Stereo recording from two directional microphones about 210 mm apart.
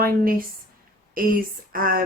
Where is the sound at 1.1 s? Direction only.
45° right (ahead or behind).